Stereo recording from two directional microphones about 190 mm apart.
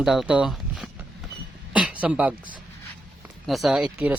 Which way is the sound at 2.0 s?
5° right (ahead or behind).